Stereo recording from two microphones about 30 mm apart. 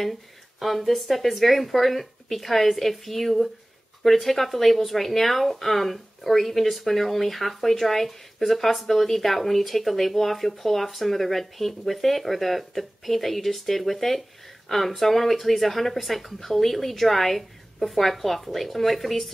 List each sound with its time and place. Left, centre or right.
0.0 s speech: centre